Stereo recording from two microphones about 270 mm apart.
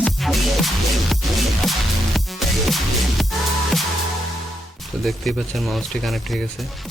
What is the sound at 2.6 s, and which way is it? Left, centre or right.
Music, centre.